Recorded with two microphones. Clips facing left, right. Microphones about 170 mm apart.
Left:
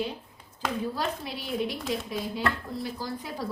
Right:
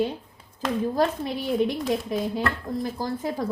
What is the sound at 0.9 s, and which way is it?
Speech, 50° right (ahead or behind).